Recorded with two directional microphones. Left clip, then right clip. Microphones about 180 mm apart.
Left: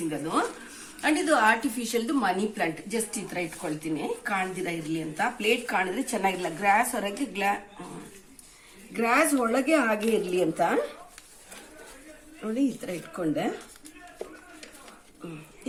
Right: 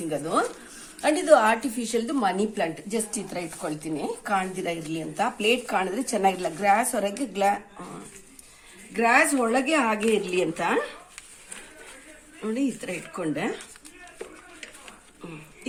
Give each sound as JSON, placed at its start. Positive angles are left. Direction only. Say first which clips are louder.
{"t": 0.1, "sound": "a woman's voice", "louder": "right 5 dB", "side_deg": -35}
{"t": 8.9, "sound": "a woman's voice", "louder": "right 3 dB", "side_deg": -35}
{"t": 12.4, "sound": "a woman's voice", "louder": "even", "side_deg": -30}